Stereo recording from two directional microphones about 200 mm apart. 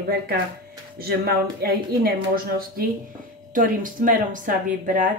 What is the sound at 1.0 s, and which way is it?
Speech, 50° right (ahead or behind).